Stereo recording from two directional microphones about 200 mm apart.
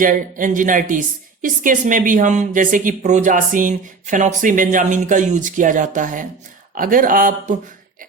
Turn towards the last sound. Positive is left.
turn(degrees=-40)  # may be behind; listen again after turning